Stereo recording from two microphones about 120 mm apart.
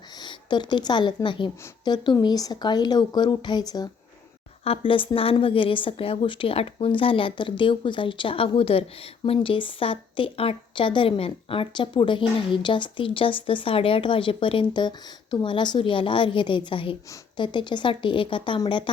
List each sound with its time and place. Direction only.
0.2 s speech: 40° left (ahead or behind)
4.6 s a woman's voice: 50° left (ahead or behind)